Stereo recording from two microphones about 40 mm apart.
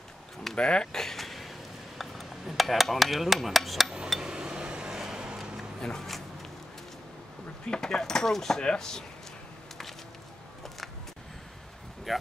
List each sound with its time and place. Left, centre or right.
0.6 s speech: left
0.9 s a sound: centre
4.2 s a sound: centre
5.8 s speech: centre
7.6 s speech: centre
12.1 s speech: centre